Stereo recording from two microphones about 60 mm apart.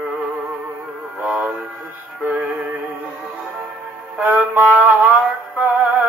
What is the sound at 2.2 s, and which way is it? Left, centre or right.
Music, right.